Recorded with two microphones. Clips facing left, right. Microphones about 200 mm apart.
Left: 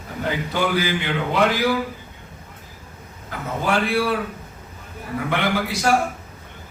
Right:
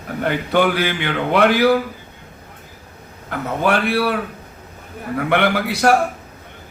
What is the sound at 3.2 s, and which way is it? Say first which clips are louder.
Speech: right 5 dB; 65° right (ahead or behind).